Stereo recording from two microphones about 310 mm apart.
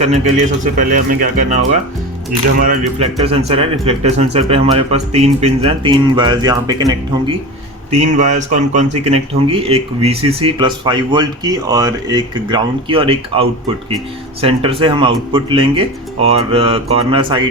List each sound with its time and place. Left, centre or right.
0.6 s speech: right
2.6 s speech: right